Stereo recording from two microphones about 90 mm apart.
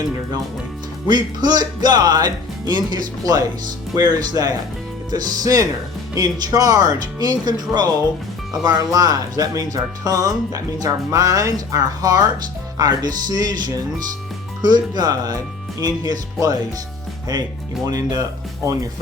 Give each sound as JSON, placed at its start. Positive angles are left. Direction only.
{"t": 1.0, "sound": "speech", "side_deg": -55}
{"t": 14.6, "sound": "speech", "side_deg": -50}